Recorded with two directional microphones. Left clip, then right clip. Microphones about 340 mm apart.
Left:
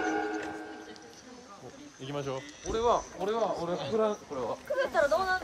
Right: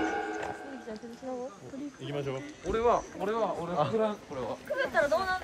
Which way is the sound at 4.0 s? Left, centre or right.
Left.